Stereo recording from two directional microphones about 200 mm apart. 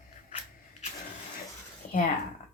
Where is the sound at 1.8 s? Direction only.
40° left (ahead or behind).